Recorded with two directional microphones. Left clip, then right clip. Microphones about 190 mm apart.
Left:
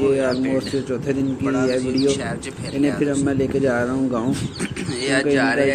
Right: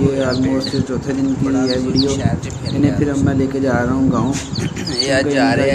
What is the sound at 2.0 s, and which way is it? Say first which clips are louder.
Speech: right 2 dB; 5° right (ahead or behind).